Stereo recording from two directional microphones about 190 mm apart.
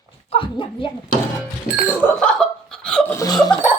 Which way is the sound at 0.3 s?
25° left (ahead or behind).